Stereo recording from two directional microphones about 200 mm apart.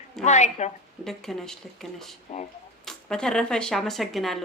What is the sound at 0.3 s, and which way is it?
Speech, 35° left (ahead or behind).